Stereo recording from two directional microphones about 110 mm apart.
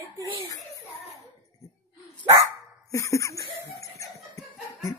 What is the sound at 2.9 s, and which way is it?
Laughter, 25° left (ahead or behind).